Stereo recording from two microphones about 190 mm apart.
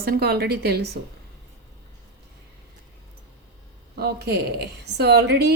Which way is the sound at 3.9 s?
55° right (ahead or behind).